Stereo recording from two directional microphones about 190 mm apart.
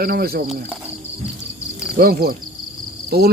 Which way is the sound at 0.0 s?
50° right (ahead or behind).